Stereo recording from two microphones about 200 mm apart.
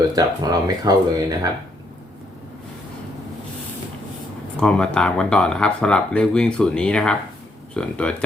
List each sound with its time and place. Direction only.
0.0 s speech: 20° right (ahead or behind)
4.6 s speech: 5° left (ahead or behind)